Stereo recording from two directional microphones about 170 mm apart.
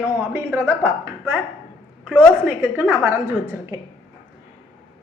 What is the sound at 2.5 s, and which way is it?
A woman's voice, 10° right (ahead or behind).